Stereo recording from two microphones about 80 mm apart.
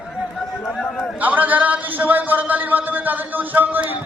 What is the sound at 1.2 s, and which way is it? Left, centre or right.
Speech, right.